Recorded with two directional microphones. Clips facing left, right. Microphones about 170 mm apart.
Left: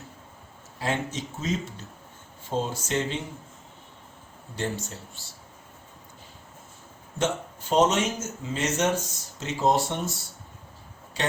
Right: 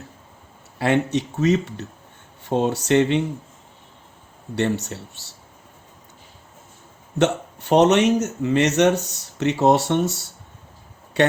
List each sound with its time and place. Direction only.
0.8 s speech: 70° right (ahead or behind)
4.5 s speech: 70° right (ahead or behind)
7.2 s speech: 70° right (ahead or behind)
11.2 s speech: 65° right (ahead or behind)